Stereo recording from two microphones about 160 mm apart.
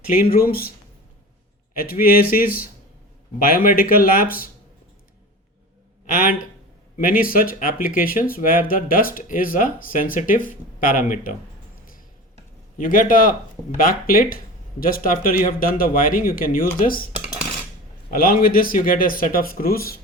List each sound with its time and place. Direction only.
0.1 s speech: 65° left (ahead or behind)
1.7 s speech: 65° left (ahead or behind)
6.1 s a man's voice: 65° left (ahead or behind)
12.7 s speech: 60° left (ahead or behind)
18.1 s speech: 65° left (ahead or behind)